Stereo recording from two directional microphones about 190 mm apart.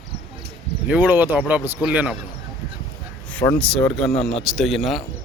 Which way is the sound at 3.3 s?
10° left (ahead or behind).